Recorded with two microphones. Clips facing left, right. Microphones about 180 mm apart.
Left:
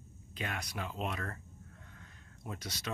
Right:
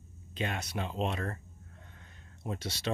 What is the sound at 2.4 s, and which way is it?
Speech, 30° right (ahead or behind).